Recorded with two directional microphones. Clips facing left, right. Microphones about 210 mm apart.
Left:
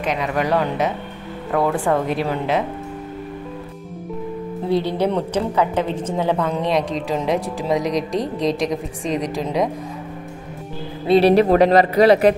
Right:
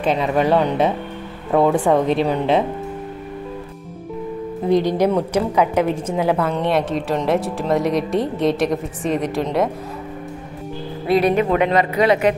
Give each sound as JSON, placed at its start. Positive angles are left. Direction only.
{"t": 0.0, "sound": "speech", "side_deg": -30}
{"t": 4.6, "sound": "a woman's voice", "side_deg": -15}
{"t": 11.1, "sound": "a woman's voice", "side_deg": 30}